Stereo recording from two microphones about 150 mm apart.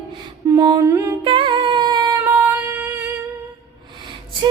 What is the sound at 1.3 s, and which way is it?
Music, 30° right (ahead or behind).